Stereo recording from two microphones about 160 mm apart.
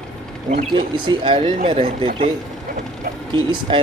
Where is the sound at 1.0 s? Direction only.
30° right (ahead or behind).